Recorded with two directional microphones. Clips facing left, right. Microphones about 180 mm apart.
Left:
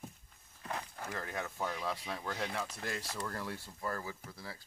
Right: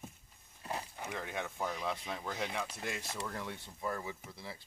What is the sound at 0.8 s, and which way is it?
Speech, 5° right (ahead or behind).